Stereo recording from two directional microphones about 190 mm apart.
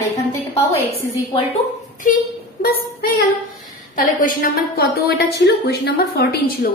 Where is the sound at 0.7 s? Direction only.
30° left (ahead or behind).